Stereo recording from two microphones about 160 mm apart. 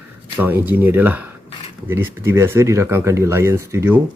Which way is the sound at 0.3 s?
15° right (ahead or behind).